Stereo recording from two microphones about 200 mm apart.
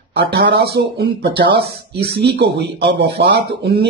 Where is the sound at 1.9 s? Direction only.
55° right (ahead or behind).